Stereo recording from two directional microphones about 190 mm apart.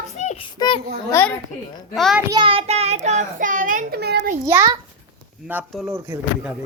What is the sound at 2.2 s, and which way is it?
A child's voice, 25° right (ahead or behind).